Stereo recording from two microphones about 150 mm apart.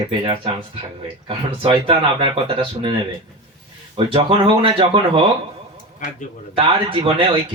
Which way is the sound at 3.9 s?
35° right (ahead or behind).